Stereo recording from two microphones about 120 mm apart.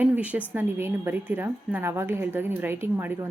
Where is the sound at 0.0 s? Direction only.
10° right (ahead or behind).